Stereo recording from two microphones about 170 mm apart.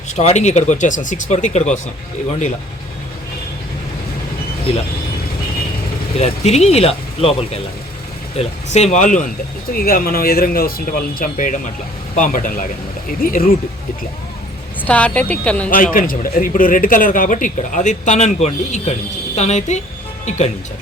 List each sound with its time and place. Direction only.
0.1 s a man's voice: 40° left (ahead or behind)
6.1 s a man's voice: 40° left (ahead or behind)
9.7 s a man's voice: 60° left (ahead or behind)
14.8 s speech: 10° left (ahead or behind)
15.7 s a man's voice: 55° left (ahead or behind)